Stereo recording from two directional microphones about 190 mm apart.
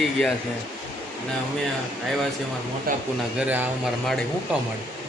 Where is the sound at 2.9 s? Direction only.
50° right (ahead or behind).